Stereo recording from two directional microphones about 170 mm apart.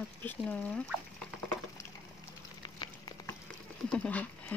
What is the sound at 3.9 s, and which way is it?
Speech, 5° left (ahead or behind).